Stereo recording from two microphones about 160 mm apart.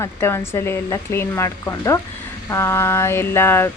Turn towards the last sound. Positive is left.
turn(degrees=15)  # may be behind; listen again after turning